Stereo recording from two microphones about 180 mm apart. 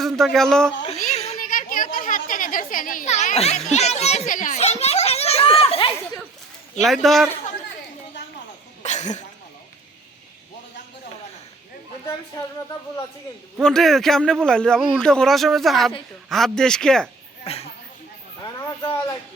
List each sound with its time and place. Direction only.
0.0 s a man's voice: centre (ahead or behind)
0.9 s a sound: 35° left (ahead or behind)
3.7 s children playing: 40° left (ahead or behind)
6.8 s speech: centre (ahead or behind)
8.8 s a sound: 40° left (ahead or behind)
13.6 s speech: 5° left (ahead or behind)
17.4 s speech: 35° left (ahead or behind)